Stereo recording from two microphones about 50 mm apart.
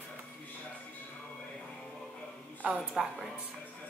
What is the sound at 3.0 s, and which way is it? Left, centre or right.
Speech, centre.